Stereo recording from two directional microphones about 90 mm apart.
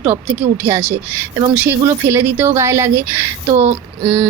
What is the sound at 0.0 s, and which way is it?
Speech, 25° right (ahead or behind).